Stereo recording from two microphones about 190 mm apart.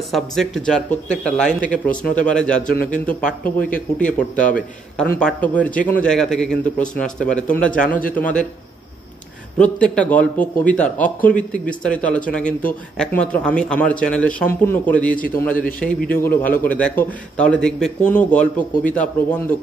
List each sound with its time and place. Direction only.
0.1 s a man's voice: centre (ahead or behind)
4.4 s a man's voice: 45° left (ahead or behind)
4.9 s a man's voice: 5° left (ahead or behind)
9.6 s speech: 5° left (ahead or behind)
15.1 s a man's voice: 45° left (ahead or behind)
16.2 s speech: 10° left (ahead or behind)